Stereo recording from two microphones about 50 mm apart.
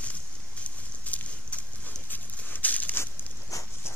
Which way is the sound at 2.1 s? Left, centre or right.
Left.